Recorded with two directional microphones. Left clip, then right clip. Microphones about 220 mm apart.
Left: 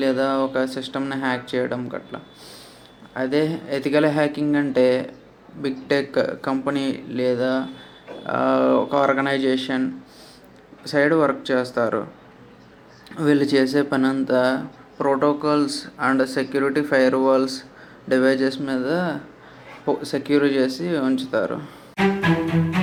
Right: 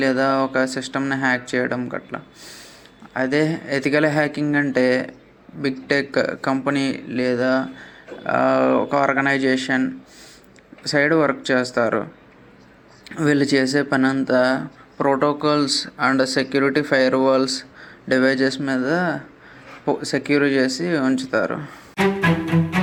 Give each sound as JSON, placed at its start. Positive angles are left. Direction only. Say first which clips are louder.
{"t": 0.0, "sound": "speech", "louder": "right 2 dB", "side_deg": -25}
{"t": 13.1, "sound": "speech", "louder": "right 1 dB", "side_deg": -25}
{"t": 21.9, "sound": "music", "louder": "right 1 dB", "side_deg": 0}